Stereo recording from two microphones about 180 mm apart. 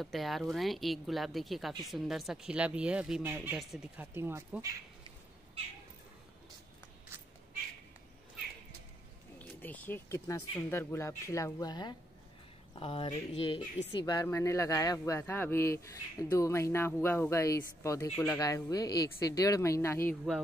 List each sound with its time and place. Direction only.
0.0 s speech: centre (ahead or behind); by 4.7 s 15° right (ahead or behind)
5.0 s cat: 35° right (ahead or behind)
9.4 s speech: 10° left (ahead or behind)